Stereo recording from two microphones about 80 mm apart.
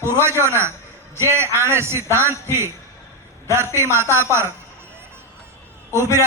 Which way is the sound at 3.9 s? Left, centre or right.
Right.